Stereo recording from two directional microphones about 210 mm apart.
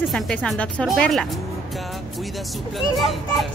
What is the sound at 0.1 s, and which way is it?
A woman's voice, centre (ahead or behind).